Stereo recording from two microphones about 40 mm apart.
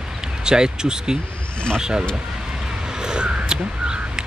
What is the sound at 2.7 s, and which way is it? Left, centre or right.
Crow, centre.